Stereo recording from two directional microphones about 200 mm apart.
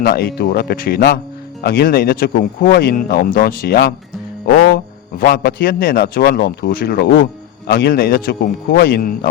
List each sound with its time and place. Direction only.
0.0 s a man's voice: 50° left (ahead or behind)